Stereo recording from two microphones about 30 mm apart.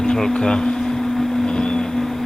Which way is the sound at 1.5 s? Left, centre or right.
Left.